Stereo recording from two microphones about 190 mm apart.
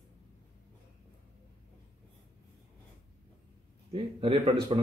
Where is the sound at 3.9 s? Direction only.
25° right (ahead or behind).